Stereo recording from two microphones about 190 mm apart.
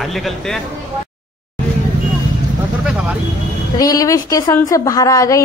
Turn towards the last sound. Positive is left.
turn(degrees=15)  # may be behind; listen again after turning